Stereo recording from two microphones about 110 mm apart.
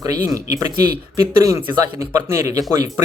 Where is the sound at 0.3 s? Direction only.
30° right (ahead or behind).